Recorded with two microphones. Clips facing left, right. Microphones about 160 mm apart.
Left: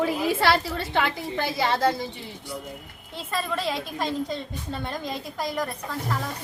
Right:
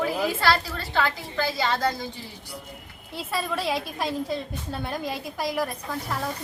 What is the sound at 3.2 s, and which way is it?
A woman's voice, 10° right (ahead or behind).